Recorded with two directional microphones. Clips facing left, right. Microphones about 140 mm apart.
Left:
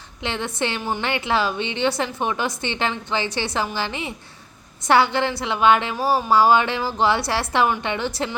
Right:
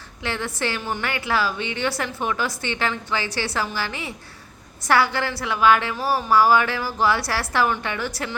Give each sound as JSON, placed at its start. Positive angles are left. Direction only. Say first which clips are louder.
{"t": 0.2, "sound": "a woman's voice", "louder": "left 2 dB", "side_deg": 20}